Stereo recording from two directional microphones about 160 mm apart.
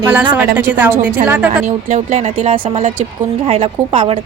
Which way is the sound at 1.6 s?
50° right (ahead or behind).